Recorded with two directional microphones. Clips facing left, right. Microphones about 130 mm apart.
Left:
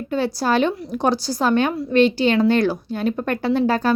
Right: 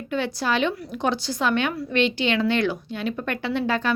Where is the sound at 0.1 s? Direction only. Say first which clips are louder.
Left 4 dB; 35° left (ahead or behind).